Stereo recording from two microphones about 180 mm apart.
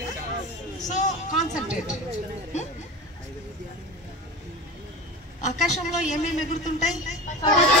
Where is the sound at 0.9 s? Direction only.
40° left (ahead or behind).